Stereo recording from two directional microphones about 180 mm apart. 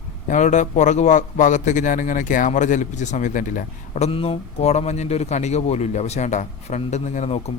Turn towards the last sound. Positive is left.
turn(degrees=35)  # may be behind; listen again after turning